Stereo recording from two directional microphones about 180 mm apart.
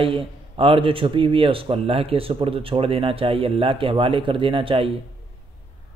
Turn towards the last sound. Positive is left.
turn(degrees=-30)  # may be behind; listen again after turning